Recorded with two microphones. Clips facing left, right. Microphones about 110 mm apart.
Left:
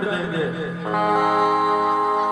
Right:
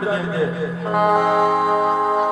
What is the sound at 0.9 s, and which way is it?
A man's voice, 25° right (ahead or behind).